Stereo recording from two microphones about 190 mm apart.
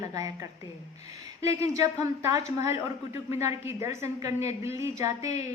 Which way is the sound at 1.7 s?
15° right (ahead or behind).